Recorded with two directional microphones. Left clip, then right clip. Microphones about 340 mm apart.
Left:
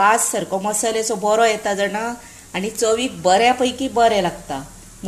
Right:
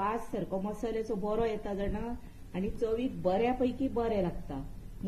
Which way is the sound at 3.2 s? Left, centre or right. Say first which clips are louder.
Left 15 dB; left.